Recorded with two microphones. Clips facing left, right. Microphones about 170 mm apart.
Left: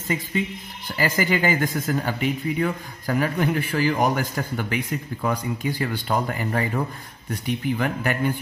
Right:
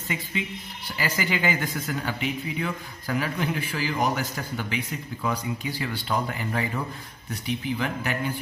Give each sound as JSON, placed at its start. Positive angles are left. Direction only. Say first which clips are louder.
{"t": 0.9, "sound": "speech", "louder": "left 5 dB", "side_deg": 50}